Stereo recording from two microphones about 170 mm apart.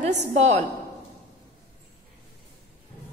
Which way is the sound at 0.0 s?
45° right (ahead or behind).